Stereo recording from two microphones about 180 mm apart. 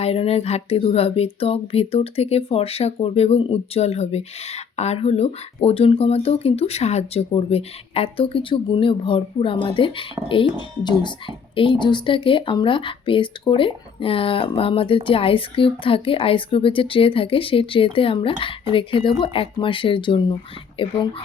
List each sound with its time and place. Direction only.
0.0 s speech: 35° left (ahead or behind)
11.5 s speech: 30° left (ahead or behind)